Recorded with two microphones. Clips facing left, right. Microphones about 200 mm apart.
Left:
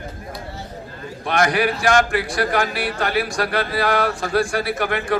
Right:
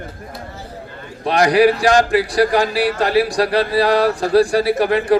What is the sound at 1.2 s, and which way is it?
A man's voice, 35° right (ahead or behind).